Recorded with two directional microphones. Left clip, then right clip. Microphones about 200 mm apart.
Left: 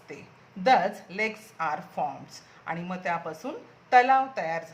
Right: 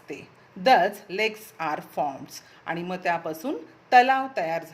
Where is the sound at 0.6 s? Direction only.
40° right (ahead or behind).